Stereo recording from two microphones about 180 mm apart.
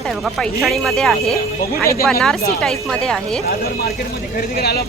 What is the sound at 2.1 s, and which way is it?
A woman's voice, centre (ahead or behind).